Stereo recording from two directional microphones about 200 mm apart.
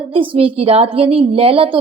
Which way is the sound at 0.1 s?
25° right (ahead or behind).